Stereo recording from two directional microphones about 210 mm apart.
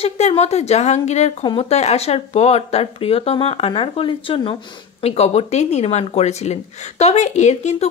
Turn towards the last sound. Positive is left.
turn(degrees=30)  # may be behind; listen again after turning